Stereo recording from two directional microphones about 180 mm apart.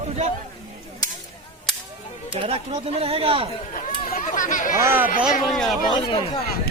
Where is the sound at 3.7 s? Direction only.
45° left (ahead or behind).